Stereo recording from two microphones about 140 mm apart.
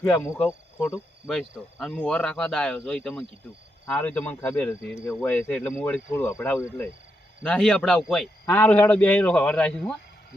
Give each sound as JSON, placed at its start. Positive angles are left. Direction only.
{"t": 0.0, "sound": "speech", "side_deg": 10}
{"t": 1.3, "sound": "speech", "side_deg": 5}
{"t": 7.4, "sound": "speech", "side_deg": 5}
{"t": 8.4, "sound": "speech", "side_deg": 10}